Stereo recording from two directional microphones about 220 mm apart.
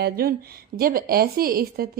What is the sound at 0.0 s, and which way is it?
A woman's voice, 45° right (ahead or behind).